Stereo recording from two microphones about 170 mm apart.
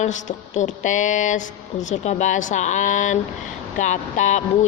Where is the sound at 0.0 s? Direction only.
45° left (ahead or behind).